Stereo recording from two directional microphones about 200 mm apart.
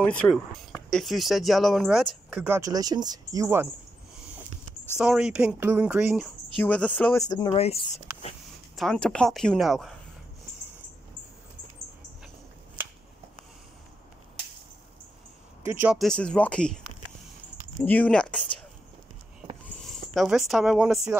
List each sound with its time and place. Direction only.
0.0 s speech: 5° left (ahead or behind); by 3.6 s 15° right (ahead or behind)
4.9 s speech: 5° right (ahead or behind)
6.6 s speech: 5° left (ahead or behind)
7.2 s speech: 20° left (ahead or behind)
8.7 s speech: 5° left (ahead or behind)
15.6 s speech: 10° right (ahead or behind)
16.0 s speech: 5° left (ahead or behind)
20.2 s speech: centre (ahead or behind)